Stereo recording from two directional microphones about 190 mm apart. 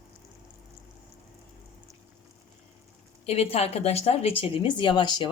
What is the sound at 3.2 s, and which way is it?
Speech, 30° left (ahead or behind).